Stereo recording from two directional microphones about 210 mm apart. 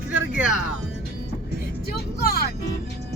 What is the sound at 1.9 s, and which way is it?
Speech, 45° left (ahead or behind).